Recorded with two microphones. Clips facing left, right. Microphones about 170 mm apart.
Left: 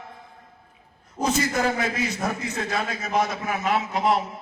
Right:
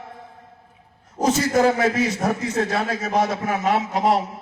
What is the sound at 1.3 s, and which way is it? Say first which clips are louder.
A man's voice: right 6 dB; 40° right (ahead or behind).